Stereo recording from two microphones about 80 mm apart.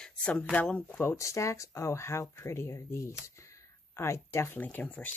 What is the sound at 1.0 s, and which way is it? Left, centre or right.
Speech, left.